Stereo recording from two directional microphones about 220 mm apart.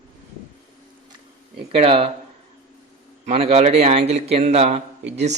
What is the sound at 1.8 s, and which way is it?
Speech, 25° right (ahead or behind).